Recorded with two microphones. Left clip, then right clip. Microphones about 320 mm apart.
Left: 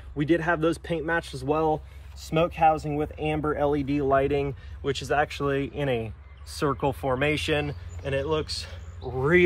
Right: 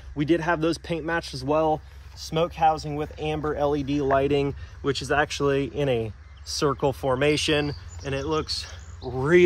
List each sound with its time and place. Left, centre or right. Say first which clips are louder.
0.1 s speech: right 1 dB; right